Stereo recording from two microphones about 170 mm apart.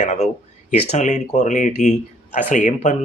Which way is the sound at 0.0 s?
45° left (ahead or behind).